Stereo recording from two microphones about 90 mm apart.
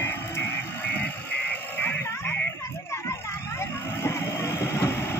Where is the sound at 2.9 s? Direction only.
30° left (ahead or behind).